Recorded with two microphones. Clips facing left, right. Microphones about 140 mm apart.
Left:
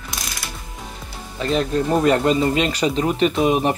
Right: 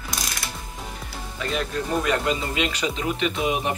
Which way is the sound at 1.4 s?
35° left (ahead or behind).